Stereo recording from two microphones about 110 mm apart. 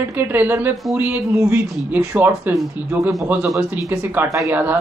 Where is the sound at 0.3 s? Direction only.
15° right (ahead or behind).